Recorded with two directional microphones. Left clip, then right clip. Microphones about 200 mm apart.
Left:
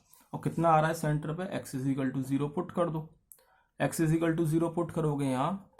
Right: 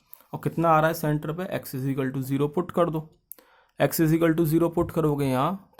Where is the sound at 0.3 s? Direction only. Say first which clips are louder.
Right 4 dB; 40° right (ahead or behind).